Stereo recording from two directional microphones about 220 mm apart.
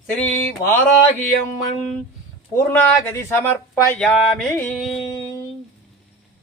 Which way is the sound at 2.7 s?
10° left (ahead or behind).